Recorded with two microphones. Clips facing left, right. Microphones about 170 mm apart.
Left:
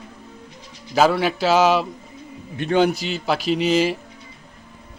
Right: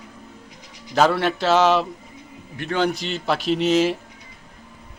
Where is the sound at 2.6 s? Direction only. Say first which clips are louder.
Left 4 dB; 15° left (ahead or behind).